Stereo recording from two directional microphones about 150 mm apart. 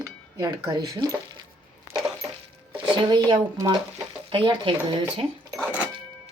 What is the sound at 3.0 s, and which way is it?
Speech, 30° right (ahead or behind).